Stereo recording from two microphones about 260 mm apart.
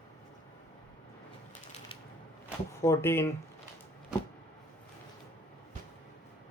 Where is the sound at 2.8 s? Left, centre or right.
Centre.